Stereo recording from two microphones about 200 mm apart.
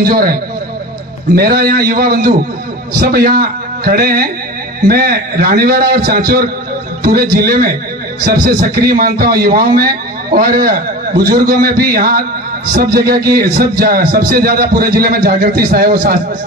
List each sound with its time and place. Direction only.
0.0 s a man's voice: 50° right (ahead or behind)